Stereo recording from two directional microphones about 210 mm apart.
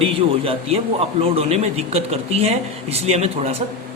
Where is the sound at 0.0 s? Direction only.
25° right (ahead or behind).